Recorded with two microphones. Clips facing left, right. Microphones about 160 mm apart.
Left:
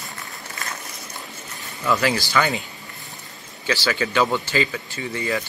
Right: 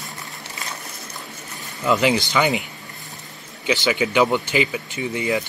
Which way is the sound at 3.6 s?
15° right (ahead or behind).